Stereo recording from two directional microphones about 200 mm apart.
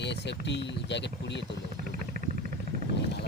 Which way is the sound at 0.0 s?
60° left (ahead or behind).